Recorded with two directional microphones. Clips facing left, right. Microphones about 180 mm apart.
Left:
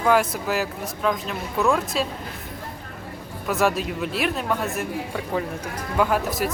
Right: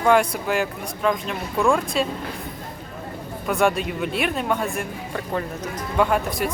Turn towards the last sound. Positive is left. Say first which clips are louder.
# right 1 dB
turn(degrees=5)  # may be behind; listen again after turning